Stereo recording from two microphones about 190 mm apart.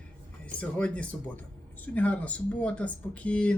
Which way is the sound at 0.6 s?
5° left (ahead or behind).